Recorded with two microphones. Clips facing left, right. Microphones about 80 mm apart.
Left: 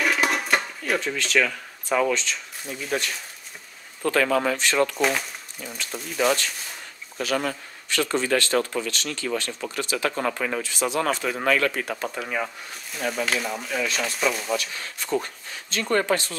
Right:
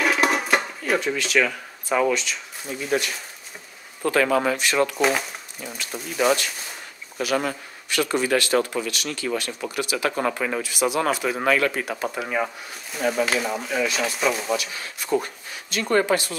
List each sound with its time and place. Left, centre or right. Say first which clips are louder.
0.0 s a sound: right 2 dB; centre
2.9 s speech: right 3 dB; centre
4.9 s speech: right 2 dB; centre